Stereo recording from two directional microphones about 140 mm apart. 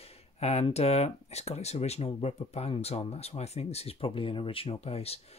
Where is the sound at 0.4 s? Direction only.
50° left (ahead or behind).